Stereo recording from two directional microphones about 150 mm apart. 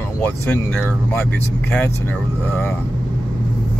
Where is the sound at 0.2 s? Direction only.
10° left (ahead or behind).